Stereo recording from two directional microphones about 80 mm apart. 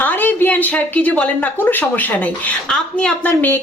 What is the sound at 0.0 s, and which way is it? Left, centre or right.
Speech, left.